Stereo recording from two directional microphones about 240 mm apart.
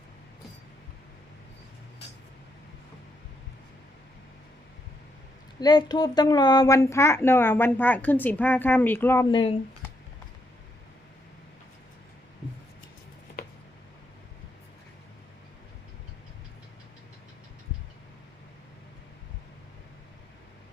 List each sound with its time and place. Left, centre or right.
5.5 s speech: centre
9.3 s speech: left